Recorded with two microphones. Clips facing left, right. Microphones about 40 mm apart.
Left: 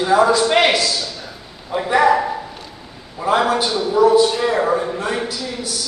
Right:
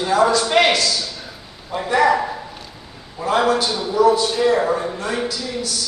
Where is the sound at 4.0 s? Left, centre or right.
Left.